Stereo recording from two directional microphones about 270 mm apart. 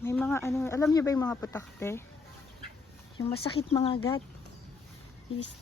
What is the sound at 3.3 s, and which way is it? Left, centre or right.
Speech, left.